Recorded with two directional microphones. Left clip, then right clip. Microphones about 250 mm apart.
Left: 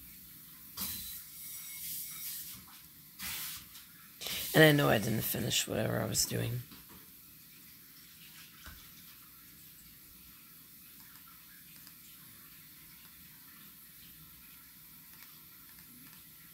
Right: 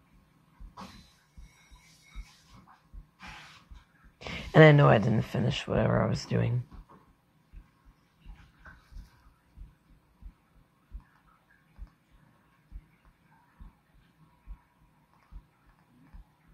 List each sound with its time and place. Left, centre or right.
4.2 s speech: centre